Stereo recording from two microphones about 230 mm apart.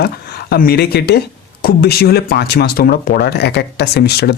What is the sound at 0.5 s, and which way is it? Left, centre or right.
Speech, left.